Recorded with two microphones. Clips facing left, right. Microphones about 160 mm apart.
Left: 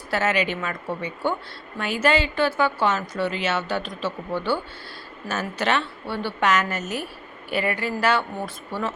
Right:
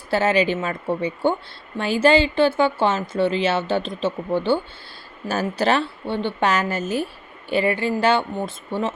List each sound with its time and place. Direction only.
0.1 s a woman's voice: 30° right (ahead or behind)